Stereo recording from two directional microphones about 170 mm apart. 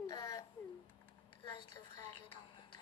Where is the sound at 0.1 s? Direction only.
20° left (ahead or behind).